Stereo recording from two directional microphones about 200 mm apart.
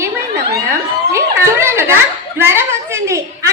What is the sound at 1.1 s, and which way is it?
A woman's voice, 15° right (ahead or behind).